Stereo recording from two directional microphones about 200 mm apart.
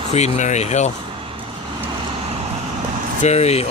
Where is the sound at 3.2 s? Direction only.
35° left (ahead or behind).